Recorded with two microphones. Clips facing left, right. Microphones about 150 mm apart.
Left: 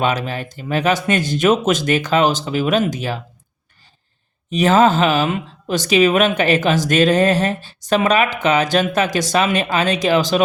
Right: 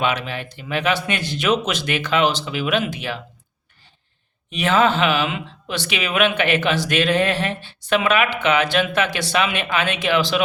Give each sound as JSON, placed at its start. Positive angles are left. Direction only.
{"t": 0.0, "sound": "speech", "side_deg": 40}
{"t": 4.5, "sound": "speech", "side_deg": 40}